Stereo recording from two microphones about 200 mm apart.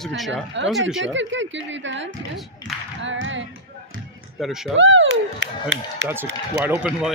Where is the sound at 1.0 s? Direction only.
65° right (ahead or behind).